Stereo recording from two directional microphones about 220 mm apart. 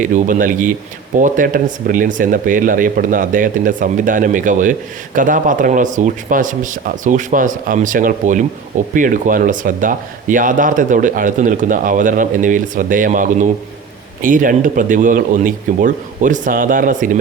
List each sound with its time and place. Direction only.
0.0 s speech: 40° right (ahead or behind)